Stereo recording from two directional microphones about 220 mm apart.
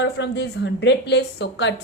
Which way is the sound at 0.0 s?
50° left (ahead or behind).